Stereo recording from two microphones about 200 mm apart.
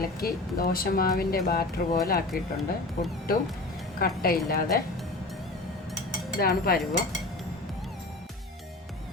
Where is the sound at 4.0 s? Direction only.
50° left (ahead or behind).